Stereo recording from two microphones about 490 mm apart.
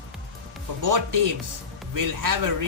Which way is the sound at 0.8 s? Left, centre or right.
Right.